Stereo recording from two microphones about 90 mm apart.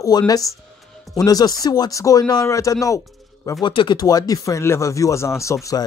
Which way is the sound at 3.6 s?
60° left (ahead or behind).